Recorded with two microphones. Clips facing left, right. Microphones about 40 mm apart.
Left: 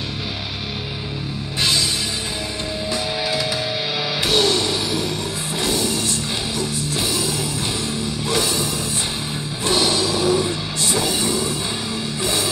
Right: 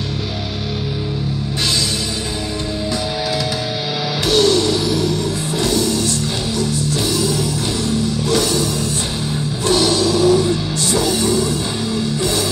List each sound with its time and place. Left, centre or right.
4.3 s music: left
9.7 s music: left